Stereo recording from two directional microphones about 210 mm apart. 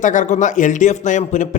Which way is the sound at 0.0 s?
35° left (ahead or behind).